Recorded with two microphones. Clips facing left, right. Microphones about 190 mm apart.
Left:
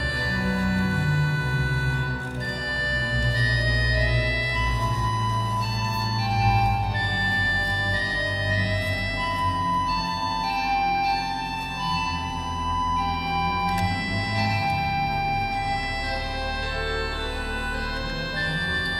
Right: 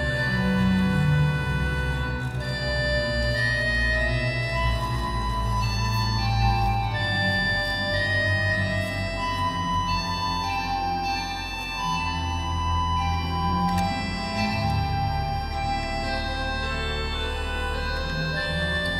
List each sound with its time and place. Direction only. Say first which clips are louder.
0.4 s music: right 2 dB; 20° right (ahead or behind)